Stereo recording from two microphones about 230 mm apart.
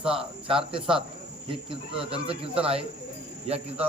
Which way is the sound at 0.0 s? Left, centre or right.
Right.